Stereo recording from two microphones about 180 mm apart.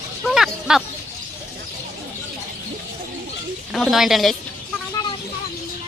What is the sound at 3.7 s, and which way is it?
Speech, centre (ahead or behind).